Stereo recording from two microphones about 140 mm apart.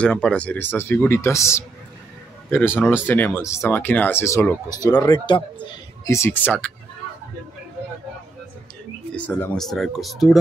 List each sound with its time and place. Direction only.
0.0 s speech: 5° left (ahead or behind); by 5.7 s 35° left (ahead or behind)
6.0 s speech: 20° left (ahead or behind)
9.1 s speech: 10° left (ahead or behind)